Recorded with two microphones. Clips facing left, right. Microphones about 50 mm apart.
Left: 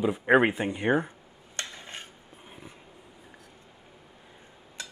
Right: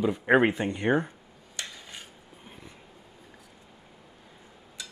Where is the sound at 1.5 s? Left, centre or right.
Left.